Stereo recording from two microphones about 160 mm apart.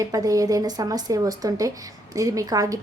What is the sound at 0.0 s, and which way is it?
A woman's voice, 20° right (ahead or behind).